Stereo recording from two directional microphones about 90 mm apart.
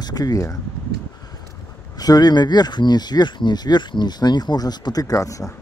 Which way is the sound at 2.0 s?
45° left (ahead or behind).